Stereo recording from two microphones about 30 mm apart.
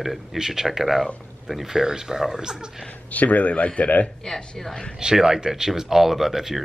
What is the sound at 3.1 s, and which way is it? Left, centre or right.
Speech, left.